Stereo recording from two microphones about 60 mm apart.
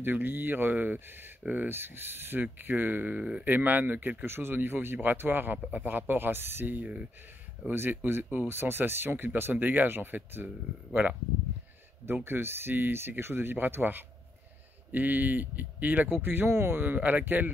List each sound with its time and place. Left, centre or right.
0.0 s speech: right
3.2 s speech: centre
3.4 s speech: right
7.6 s speech: right
12.3 s speech: right